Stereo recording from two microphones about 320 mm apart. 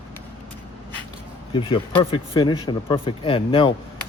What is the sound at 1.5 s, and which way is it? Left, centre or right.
Speech, centre.